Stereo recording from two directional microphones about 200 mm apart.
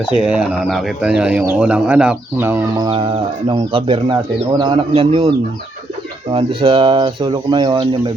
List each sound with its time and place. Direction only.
0.2 s speech: 5° right (ahead or behind); by 5.3 s 30° right (ahead or behind)
6.3 s speech: 25° right (ahead or behind)